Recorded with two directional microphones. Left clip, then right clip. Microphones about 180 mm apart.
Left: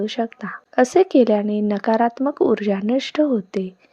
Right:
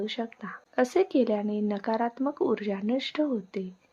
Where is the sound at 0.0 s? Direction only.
30° left (ahead or behind).